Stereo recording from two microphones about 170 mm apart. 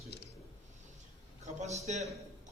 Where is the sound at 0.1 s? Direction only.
75° left (ahead or behind).